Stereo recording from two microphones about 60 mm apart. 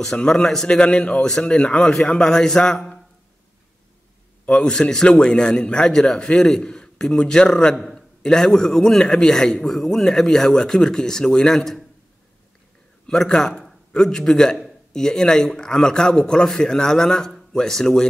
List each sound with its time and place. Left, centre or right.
0.0 s a man's voice: centre
4.5 s a man's voice: centre
13.0 s a man's voice: centre